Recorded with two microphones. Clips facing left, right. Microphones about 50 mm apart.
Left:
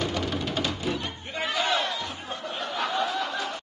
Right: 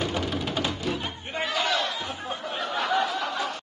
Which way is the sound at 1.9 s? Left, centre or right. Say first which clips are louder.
Right 1 dB; centre.